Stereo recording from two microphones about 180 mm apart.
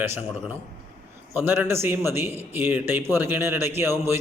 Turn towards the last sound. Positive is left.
turn(degrees=-15)  # may be behind; listen again after turning